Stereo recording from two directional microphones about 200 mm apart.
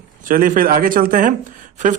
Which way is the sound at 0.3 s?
45° right (ahead or behind).